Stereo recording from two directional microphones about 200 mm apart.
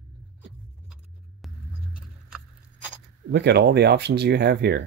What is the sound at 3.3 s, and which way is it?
Speech, 55° right (ahead or behind).